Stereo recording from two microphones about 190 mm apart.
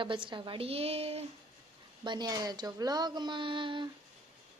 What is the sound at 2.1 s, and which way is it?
Speech, 20° right (ahead or behind).